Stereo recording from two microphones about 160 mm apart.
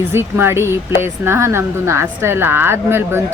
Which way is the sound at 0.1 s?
15° right (ahead or behind).